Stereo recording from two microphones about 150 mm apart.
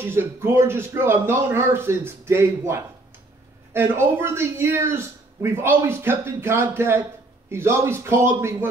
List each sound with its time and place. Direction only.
0.0 s speech: 15° right (ahead or behind)